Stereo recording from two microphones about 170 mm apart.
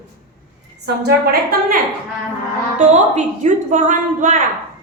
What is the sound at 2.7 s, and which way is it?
A woman's voice, 45° right (ahead or behind).